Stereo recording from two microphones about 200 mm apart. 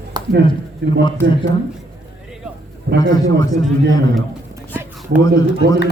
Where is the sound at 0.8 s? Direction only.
55° right (ahead or behind).